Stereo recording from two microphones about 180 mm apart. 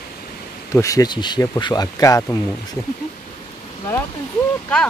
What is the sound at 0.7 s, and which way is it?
Speech, 20° left (ahead or behind).